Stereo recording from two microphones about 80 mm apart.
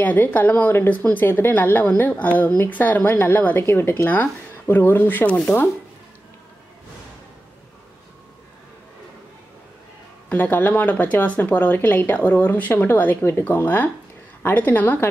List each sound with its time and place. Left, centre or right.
0.0 s speech: left
10.3 s speech: left